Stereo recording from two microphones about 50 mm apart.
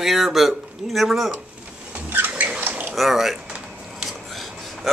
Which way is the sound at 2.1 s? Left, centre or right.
Right.